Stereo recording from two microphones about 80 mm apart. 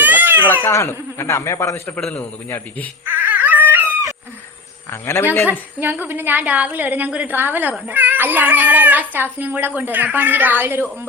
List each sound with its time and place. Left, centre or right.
0.0 s baby cry: right
0.7 s a man's voice: left
2.0 s a man's voice: centre
3.1 s dog: right
4.9 s a man's voice: left
5.8 s a woman's voice: right